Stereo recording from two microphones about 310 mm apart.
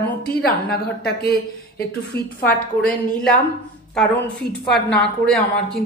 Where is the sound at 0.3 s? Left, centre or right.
Left.